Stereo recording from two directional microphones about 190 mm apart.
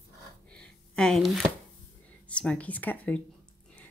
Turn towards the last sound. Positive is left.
turn(degrees=10)  # may be behind; listen again after turning